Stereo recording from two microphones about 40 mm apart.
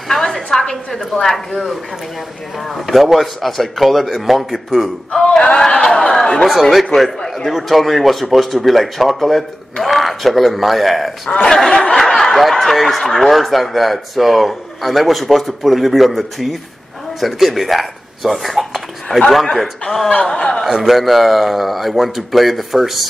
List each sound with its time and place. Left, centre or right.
0.1 s a woman's voice: centre
5.1 s a sound: centre
5.7 s speech: left
6.4 s a man's voice: centre
11.2 s speech: left
12.0 s a man's voice: centre
20.6 s a man's voice: centre
21.0 s a man's voice: centre